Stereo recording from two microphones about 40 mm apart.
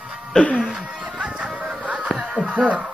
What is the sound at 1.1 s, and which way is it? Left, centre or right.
Music, right.